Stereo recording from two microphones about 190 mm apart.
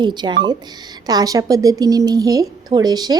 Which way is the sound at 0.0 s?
25° right (ahead or behind).